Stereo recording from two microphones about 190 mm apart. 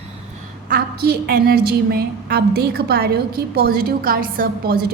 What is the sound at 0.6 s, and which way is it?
A woman's voice, 55° right (ahead or behind).